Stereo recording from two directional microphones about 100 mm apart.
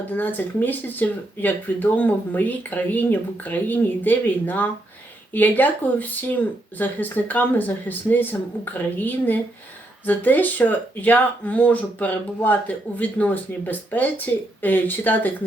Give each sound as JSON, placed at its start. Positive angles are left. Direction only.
{"t": 0.1, "sound": "speech", "side_deg": 15}